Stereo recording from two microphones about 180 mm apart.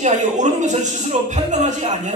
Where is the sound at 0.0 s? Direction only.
40° right (ahead or behind).